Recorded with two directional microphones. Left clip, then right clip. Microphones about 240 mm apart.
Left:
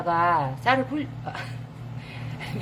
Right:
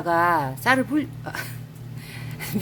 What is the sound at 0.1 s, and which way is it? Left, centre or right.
Speech, right.